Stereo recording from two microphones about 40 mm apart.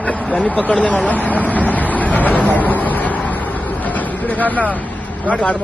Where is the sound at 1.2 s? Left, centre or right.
Left.